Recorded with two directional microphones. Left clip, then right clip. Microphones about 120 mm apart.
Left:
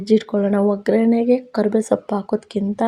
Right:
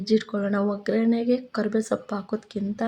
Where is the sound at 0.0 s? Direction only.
40° left (ahead or behind).